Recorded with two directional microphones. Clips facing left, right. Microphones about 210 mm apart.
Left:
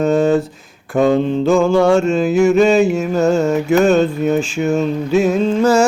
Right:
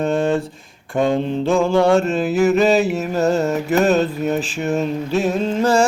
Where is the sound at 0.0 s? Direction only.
5° left (ahead or behind).